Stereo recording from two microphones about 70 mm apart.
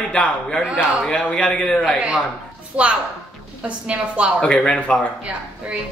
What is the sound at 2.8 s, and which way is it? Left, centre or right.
A woman's voice, centre.